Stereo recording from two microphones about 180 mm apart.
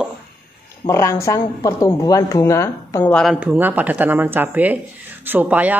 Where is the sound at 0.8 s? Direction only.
15° left (ahead or behind).